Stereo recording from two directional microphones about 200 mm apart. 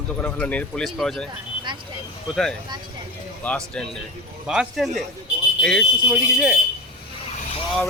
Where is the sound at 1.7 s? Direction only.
25° right (ahead or behind).